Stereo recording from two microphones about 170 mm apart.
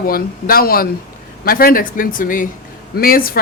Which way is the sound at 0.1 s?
60° left (ahead or behind).